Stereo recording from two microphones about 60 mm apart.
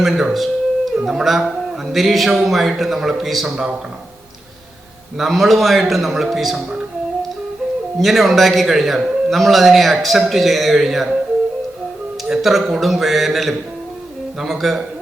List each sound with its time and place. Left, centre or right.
0.0 s a man's voice: centre
3.5 s speech: centre
5.1 s a man's voice: centre
7.9 s a man's voice: centre
12.3 s a man's voice: centre